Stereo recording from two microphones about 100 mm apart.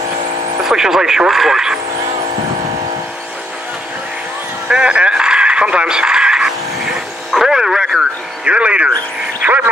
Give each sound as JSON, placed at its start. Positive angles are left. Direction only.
{"t": 0.7, "sound": "speech", "side_deg": -5}
{"t": 4.6, "sound": "a sound", "side_deg": -10}
{"t": 9.4, "sound": "speech", "side_deg": -15}